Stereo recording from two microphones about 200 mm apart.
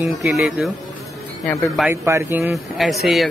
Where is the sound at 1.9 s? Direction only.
15° right (ahead or behind).